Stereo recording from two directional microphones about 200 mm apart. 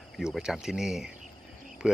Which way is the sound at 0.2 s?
5° right (ahead or behind).